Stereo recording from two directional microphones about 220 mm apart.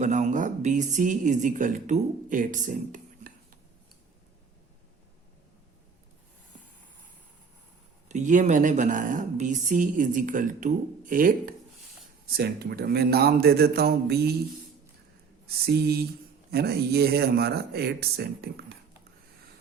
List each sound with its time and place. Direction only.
0.0 s speech: 35° right (ahead or behind)
8.0 s speech: 35° right (ahead or behind)
15.4 s speech: 45° right (ahead or behind)